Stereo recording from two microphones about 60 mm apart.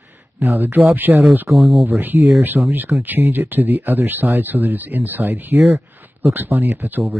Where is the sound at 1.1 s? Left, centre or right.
Centre.